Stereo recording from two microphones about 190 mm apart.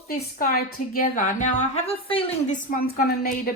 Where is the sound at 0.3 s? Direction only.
45° left (ahead or behind); by 2.2 s 30° left (ahead or behind).